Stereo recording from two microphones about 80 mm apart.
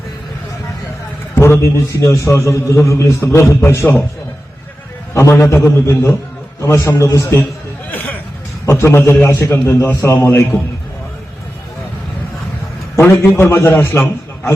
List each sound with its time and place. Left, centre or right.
1.4 s a man's voice: left
5.1 s a man's voice: left
7.9 s hubbub: centre
8.6 s a man's voice: left
13.0 s a man's voice: left